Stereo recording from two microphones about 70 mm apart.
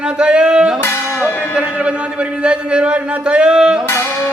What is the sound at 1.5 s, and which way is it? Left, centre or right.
A man's voice, centre.